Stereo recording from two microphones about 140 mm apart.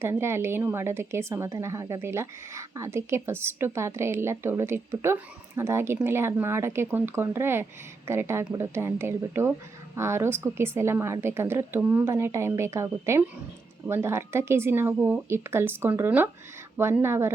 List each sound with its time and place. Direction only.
0.0 s a woman's voice: 20° right (ahead or behind)